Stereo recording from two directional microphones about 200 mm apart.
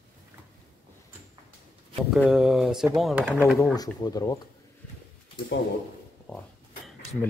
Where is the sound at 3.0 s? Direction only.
5° right (ahead or behind).